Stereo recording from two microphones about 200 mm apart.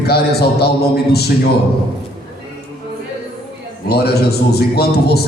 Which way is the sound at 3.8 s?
55° left (ahead or behind).